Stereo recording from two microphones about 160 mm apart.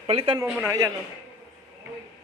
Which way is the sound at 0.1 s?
35° right (ahead or behind).